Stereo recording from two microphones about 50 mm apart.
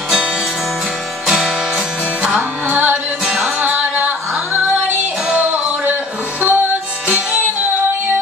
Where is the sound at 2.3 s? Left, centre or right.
Right.